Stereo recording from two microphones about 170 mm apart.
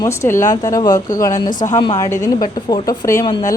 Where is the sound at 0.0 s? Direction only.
15° left (ahead or behind).